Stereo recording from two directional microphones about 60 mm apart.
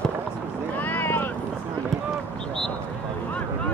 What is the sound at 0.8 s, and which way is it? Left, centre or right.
Vehicle, left.